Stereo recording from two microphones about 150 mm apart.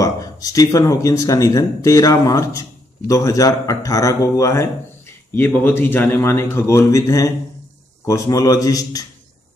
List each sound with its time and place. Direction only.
0.0 s speech: 25° left (ahead or behind)